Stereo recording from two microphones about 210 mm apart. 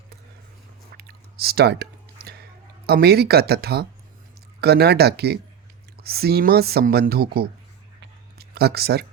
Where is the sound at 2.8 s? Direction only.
50° right (ahead or behind).